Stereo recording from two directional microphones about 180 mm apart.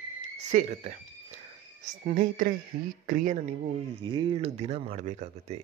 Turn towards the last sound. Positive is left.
turn(degrees=-40)  # may be behind; listen again after turning